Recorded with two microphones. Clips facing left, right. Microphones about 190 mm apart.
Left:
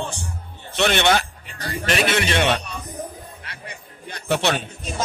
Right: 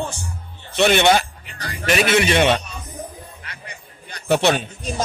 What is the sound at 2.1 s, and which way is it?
Speech, 15° right (ahead or behind).